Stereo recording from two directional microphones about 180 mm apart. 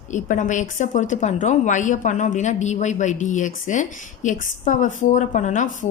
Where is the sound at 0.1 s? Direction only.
45° left (ahead or behind).